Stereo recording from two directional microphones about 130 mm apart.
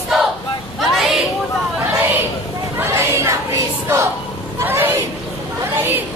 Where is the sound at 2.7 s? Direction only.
20° right (ahead or behind).